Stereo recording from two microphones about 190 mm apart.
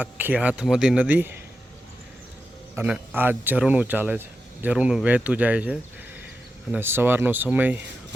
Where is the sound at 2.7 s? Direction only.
10° right (ahead or behind).